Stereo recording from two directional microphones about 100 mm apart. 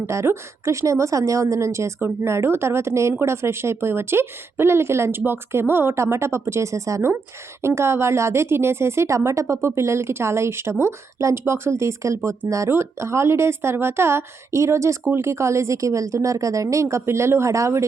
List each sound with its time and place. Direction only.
0.1 s a woman's voice: 30° right (ahead or behind)